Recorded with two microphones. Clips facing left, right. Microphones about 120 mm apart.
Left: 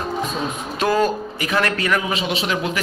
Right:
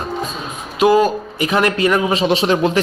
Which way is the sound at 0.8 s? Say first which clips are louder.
Right 6 dB; 15° right (ahead or behind).